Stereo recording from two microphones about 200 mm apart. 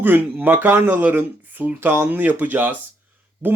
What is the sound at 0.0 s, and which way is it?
Speech, 10° right (ahead or behind).